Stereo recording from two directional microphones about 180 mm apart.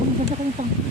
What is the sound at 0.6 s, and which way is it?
Speech, 40° right (ahead or behind).